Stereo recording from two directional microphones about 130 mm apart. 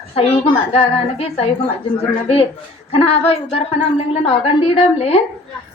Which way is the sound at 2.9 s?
50° left (ahead or behind).